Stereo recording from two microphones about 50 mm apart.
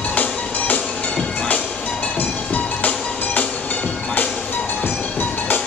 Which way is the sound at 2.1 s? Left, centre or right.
Left.